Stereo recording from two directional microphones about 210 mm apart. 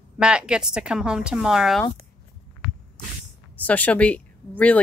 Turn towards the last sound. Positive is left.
turn(degrees=5)  # may be behind; listen again after turning